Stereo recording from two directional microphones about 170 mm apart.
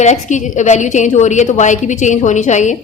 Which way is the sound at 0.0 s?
45° left (ahead or behind).